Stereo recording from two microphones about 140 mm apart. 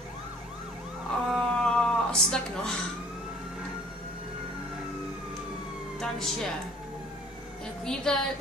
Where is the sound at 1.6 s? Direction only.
5° left (ahead or behind).